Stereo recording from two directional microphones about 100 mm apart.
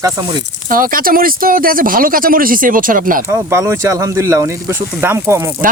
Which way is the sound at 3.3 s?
25° right (ahead or behind).